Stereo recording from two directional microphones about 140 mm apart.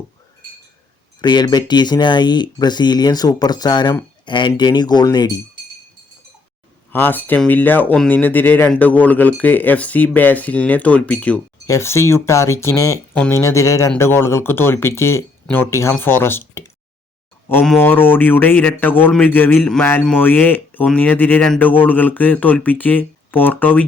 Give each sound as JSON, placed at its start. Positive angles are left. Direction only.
{"t": 1.2, "sound": "speech", "side_deg": 30}
{"t": 6.9, "sound": "speech", "side_deg": 15}
{"t": 11.6, "sound": "speech", "side_deg": 20}
{"t": 17.7, "sound": "speech", "side_deg": 15}